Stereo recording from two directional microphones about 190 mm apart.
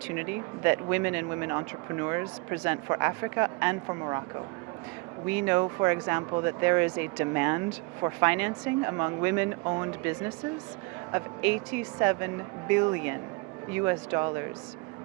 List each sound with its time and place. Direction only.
0.2 s speech: 15° right (ahead or behind)
3.8 s speech: 25° right (ahead or behind)
5.3 s speech: 15° right (ahead or behind)
11.9 s speech: 10° right (ahead or behind)